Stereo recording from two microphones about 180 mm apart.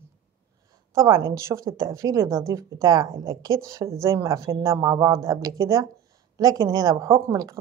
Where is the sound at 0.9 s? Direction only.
20° right (ahead or behind).